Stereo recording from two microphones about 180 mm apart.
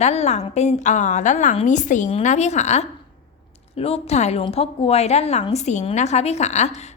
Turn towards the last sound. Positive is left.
turn(degrees=40)  # may be behind; listen again after turning